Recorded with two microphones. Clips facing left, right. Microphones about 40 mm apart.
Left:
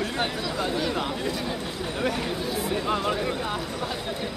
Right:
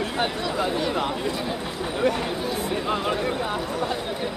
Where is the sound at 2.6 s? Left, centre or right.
Centre.